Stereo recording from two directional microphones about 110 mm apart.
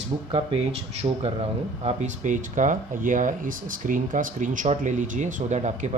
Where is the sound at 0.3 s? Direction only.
55° right (ahead or behind).